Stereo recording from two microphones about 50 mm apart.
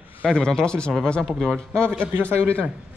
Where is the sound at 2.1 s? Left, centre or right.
Right.